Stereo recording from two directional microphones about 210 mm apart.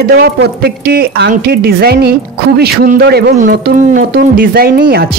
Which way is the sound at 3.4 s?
40° right (ahead or behind).